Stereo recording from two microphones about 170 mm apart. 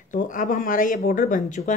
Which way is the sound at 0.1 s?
50° left (ahead or behind).